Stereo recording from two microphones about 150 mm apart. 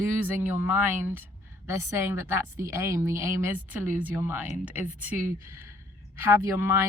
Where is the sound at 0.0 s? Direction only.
15° right (ahead or behind).